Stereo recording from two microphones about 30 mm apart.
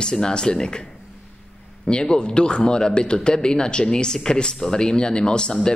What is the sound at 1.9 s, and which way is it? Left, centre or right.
A man's voice, left.